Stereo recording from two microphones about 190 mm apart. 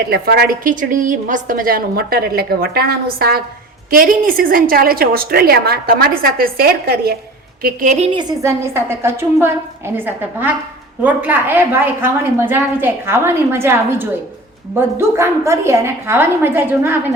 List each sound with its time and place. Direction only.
0.1 s a woman's voice: 55° right (ahead or behind)
7.6 s a woman's voice: 40° right (ahead or behind)
8.1 s a woman's voice: 15° right (ahead or behind)